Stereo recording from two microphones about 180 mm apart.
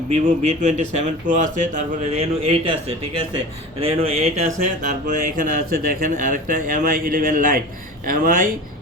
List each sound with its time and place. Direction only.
0.1 s speech: 40° right (ahead or behind)
2.1 s speech: 35° right (ahead or behind)
4.0 s speech: 35° right (ahead or behind); by 8.5 s 50° right (ahead or behind)